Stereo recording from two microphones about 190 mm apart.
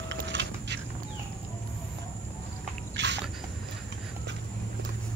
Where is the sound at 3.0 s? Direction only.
70° right (ahead or behind).